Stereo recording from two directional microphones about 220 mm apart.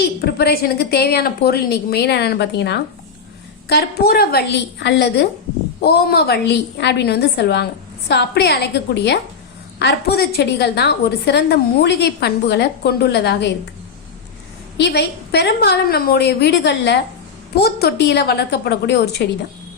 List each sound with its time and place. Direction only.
0.2 s a woman's voice: 45° left (ahead or behind)
14.8 s a woman's voice: 50° left (ahead or behind)